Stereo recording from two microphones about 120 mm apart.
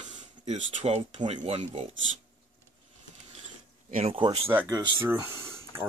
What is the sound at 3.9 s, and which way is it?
Speech, 60° right (ahead or behind).